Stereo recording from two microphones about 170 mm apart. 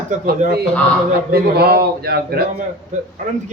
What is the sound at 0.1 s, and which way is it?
Speech, 45° right (ahead or behind).